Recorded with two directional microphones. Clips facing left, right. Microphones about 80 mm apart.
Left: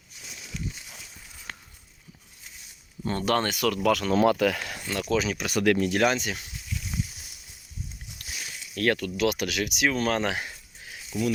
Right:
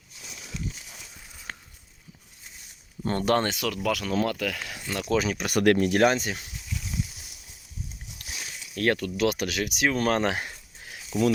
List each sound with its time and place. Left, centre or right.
3.0 s speech: right
3.4 s speech: right
3.8 s speech: centre
4.2 s speech: centre
4.9 s speech: right
5.1 s speech: right
5.5 s speech: right
8.7 s speech: right
11.1 s speech: right